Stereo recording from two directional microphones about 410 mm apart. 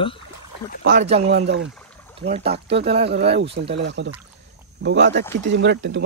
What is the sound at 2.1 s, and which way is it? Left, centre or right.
Speech, centre.